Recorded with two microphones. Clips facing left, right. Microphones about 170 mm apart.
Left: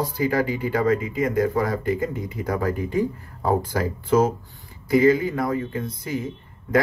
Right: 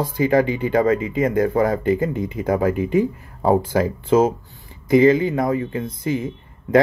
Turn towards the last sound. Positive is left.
turn(degrees=-25)  # may be behind; listen again after turning